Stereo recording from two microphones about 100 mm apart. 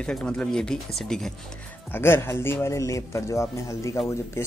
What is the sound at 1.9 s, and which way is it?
Speech, 25° left (ahead or behind).